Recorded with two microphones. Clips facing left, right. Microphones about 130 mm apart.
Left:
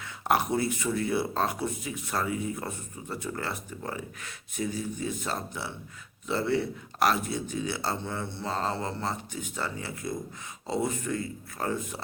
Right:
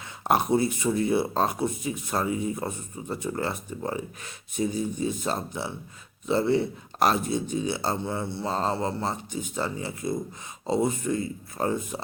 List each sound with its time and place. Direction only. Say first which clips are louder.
0.0 s speech: right 2 dB; 20° right (ahead or behind)